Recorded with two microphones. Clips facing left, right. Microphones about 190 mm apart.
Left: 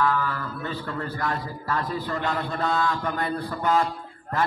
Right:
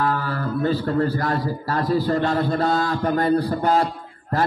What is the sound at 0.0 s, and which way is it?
A man's voice, 35° right (ahead or behind).